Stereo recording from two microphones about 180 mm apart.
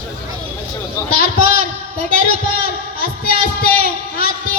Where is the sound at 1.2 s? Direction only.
55° left (ahead or behind).